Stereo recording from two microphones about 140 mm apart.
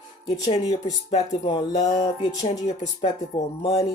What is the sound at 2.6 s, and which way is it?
Speech, 55° left (ahead or behind).